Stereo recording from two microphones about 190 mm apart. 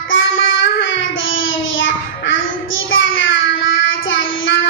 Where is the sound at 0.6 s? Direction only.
80° left.